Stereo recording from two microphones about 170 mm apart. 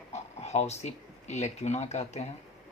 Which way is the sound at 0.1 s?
40° left (ahead or behind).